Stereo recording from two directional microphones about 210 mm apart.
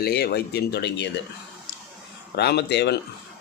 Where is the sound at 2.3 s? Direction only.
50° left (ahead or behind).